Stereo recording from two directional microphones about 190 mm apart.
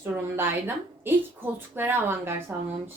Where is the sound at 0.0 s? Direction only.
10° right (ahead or behind).